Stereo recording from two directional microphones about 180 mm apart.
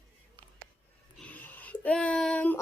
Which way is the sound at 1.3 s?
10° left (ahead or behind).